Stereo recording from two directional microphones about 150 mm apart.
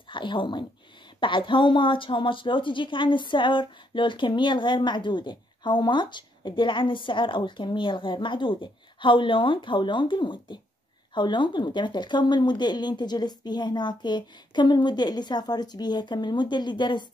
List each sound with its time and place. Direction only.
0.1 s a woman's voice: 35° left (ahead or behind)